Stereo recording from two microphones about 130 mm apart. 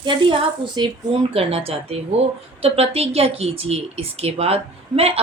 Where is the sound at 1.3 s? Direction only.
50° right (ahead or behind).